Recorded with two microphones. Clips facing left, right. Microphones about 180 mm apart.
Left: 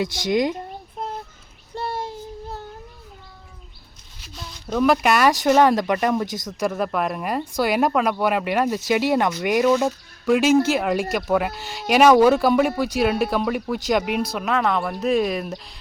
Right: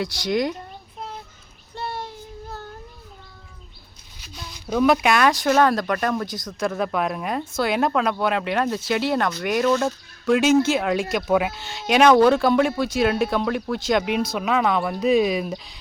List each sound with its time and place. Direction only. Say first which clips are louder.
0.3 s a woman's voice: left 2 dB; 20° left (ahead or behind)
1.7 s child singing: left 3 dB; 40° left (ahead or behind)
4.2 s a sound: left 1 dB; centre (ahead or behind)
5.3 s speech: left 2 dB; 15° left (ahead or behind)
6.7 s speech: even; 5° left (ahead or behind)
14.3 s speech: right 1 dB; centre (ahead or behind)